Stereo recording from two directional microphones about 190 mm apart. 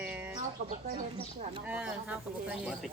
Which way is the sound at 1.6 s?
5° right (ahead or behind).